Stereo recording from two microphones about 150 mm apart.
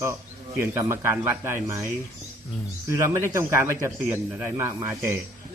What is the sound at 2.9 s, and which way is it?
A man's voice, 20° right (ahead or behind).